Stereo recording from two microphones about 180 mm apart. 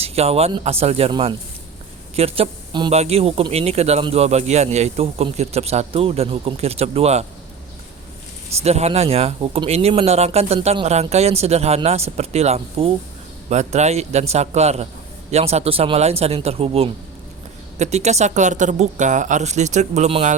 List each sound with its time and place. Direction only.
0.0 s speech: 35° right (ahead or behind)
8.6 s speech: 35° right (ahead or behind)